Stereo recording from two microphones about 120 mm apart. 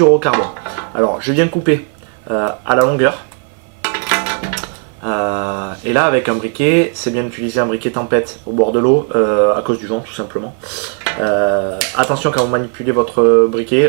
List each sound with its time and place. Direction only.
0.0 s dishes: 15° right (ahead or behind)
2.3 s speech: 15° right (ahead or behind)
3.8 s music: 10° right (ahead or behind)
5.0 s speech: 15° right (ahead or behind)